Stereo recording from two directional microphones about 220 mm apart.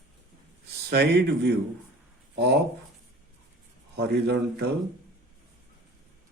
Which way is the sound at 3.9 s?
50° right (ahead or behind).